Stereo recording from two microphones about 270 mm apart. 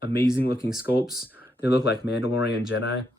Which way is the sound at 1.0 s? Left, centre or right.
Centre.